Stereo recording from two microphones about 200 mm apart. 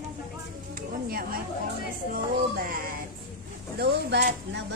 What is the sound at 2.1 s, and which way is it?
Speech, 45° right (ahead or behind).